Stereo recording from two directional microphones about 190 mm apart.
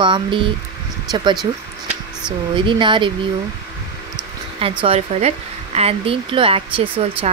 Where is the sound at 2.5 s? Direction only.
25° right (ahead or behind).